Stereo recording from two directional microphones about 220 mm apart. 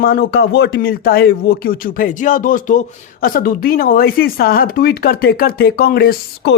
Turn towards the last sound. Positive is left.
turn(degrees=45)  # may be behind; listen again after turning